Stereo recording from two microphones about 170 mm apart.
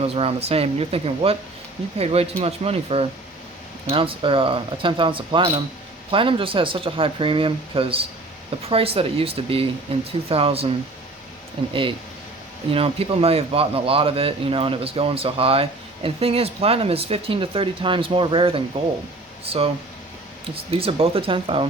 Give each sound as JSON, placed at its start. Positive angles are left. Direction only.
{"t": 0.0, "sound": "a man's voice", "side_deg": -35}
{"t": 11.7, "sound": "a man's voice", "side_deg": -30}